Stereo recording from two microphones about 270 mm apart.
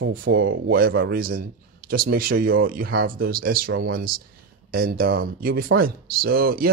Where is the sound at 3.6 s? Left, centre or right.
Right.